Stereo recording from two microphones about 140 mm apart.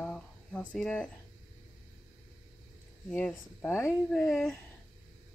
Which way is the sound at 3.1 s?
5° left (ahead or behind).